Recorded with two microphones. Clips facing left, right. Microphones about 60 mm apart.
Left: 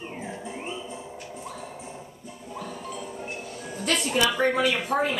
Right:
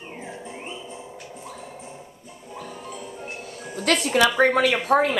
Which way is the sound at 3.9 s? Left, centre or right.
Right.